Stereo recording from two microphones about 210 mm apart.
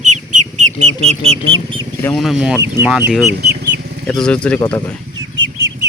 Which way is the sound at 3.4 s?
50° right (ahead or behind).